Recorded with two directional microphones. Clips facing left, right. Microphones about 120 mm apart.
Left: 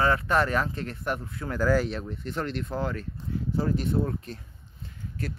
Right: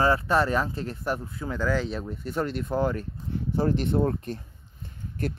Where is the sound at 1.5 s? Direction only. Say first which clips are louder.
Left 3 dB; 10° left (ahead or behind).